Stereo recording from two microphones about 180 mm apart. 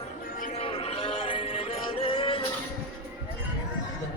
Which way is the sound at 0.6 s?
30° left (ahead or behind).